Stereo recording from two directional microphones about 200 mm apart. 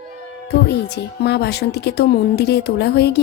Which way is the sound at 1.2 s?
55° left (ahead or behind).